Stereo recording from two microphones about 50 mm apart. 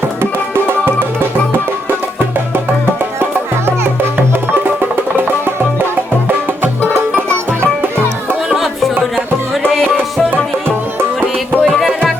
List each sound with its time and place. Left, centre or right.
0.2 s music: right
8.4 s music: centre
11.6 s music: centre